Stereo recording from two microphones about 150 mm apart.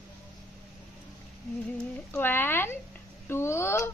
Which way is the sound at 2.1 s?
15° left (ahead or behind).